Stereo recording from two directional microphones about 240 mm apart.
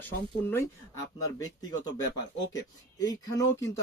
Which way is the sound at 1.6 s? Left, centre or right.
Centre.